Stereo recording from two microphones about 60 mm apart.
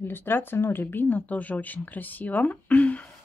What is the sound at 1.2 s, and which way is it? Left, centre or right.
Speech, left.